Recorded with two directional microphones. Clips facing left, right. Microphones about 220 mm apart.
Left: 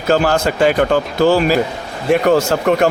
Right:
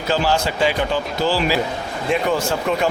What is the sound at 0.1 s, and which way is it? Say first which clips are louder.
Speech: left 6 dB; 50° left (ahead or behind).